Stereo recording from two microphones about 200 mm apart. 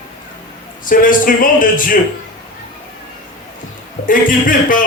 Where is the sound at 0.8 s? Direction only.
45° left (ahead or behind).